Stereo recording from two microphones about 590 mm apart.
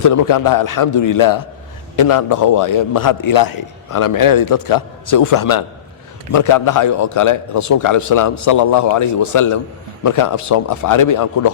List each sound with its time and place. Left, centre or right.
0.0 s a man's voice: left